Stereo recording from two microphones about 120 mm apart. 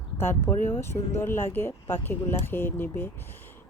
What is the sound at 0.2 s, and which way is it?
Speech, 20° left (ahead or behind).